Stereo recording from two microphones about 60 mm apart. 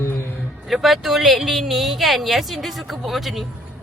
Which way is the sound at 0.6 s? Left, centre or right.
Centre.